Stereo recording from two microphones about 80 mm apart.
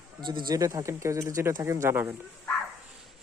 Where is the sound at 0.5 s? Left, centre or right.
Right.